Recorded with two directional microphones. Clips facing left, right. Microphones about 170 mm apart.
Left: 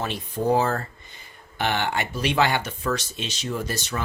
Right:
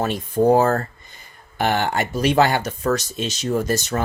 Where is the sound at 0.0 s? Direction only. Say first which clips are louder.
Right 8 dB; 45° right (ahead or behind).